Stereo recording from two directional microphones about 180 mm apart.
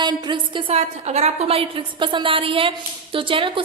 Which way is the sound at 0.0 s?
25° right (ahead or behind).